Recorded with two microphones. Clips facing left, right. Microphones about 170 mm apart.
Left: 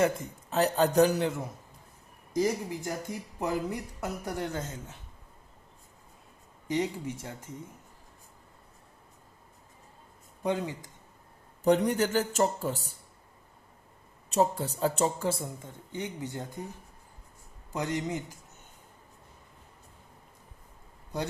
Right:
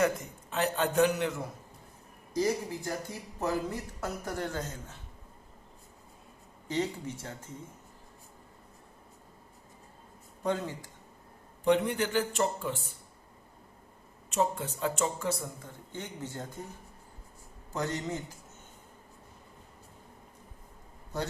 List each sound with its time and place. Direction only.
0.0 s speech: 35° left (ahead or behind)
2.3 s speech: 15° left (ahead or behind)
6.7 s speech: 15° left (ahead or behind)
10.4 s speech: 15° left (ahead or behind)
11.6 s speech: 40° left (ahead or behind)
14.3 s speech: 35° left (ahead or behind)
15.9 s speech: 15° left (ahead or behind)
17.7 s speech: 15° left (ahead or behind)